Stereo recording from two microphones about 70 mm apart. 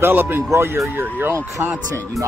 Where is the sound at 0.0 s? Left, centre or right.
Right.